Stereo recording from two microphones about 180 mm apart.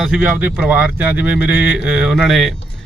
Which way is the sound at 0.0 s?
10° right (ahead or behind).